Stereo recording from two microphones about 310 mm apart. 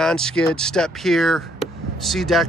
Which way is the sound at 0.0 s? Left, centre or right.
Centre.